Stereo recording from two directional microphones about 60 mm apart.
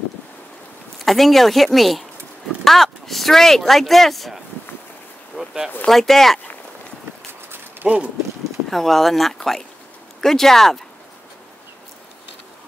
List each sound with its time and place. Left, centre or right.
0.9 s speech: centre
5.3 s a sound: centre
5.9 s speech: centre
7.8 s speech: centre
8.6 s speech: centre